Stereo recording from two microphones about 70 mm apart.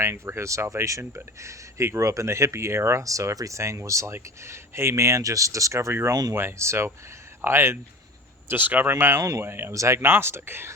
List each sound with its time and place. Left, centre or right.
0.0 s speech: right
5.9 s speech: right
8.4 s speech: right
8.9 s speech: right
9.7 s speech: right